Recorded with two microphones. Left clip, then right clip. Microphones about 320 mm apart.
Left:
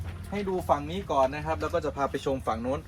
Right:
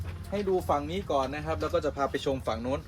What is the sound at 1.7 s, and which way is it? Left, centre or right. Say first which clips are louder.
Speech: even; left.